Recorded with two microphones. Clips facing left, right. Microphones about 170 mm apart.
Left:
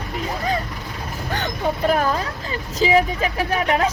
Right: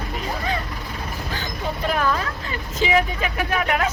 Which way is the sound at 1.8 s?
35° left (ahead or behind).